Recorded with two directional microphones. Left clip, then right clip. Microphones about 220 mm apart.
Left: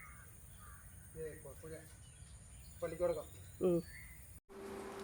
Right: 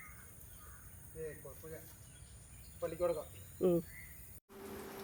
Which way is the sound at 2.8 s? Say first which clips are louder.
Right 1 dB; 5° right (ahead or behind).